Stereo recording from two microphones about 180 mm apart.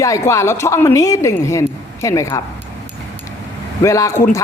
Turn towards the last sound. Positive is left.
turn(degrees=15)  # may be behind; listen again after turning